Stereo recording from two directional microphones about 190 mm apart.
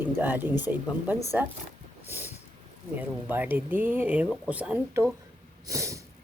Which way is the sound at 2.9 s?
10° right (ahead or behind).